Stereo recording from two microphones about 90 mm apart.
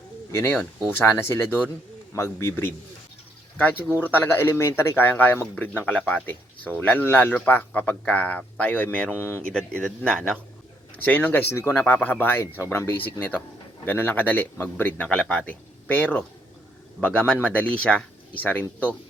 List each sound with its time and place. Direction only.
0.5 s speech: 5° left (ahead or behind)
0.9 s a man's voice: 25° left (ahead or behind)
9.1 s speech: 25° left (ahead or behind)
9.4 s a man's voice: 10° left (ahead or behind)
10.9 s a man's voice: 20° left (ahead or behind)